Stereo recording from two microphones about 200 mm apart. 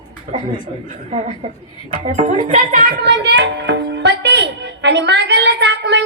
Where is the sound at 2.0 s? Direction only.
35° right (ahead or behind).